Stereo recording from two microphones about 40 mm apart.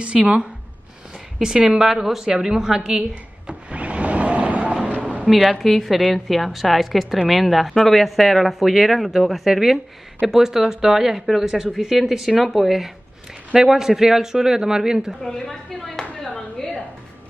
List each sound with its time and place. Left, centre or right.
0.2 s a woman's voice: right
1.4 s a man's voice: centre
3.0 s blender: right
5.3 s a man's voice: centre
15.2 s speech: centre
16.3 s a sound: centre